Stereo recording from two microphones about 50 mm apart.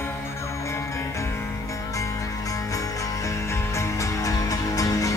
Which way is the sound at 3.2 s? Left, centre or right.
Left.